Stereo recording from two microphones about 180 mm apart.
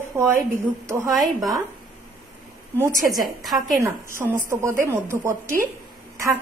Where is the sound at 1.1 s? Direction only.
Centre (ahead or behind).